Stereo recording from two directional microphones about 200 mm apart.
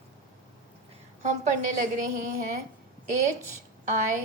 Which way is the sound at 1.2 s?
35° right (ahead or behind).